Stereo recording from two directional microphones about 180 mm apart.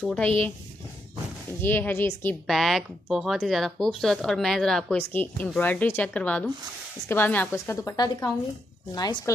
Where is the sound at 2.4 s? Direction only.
Centre (ahead or behind).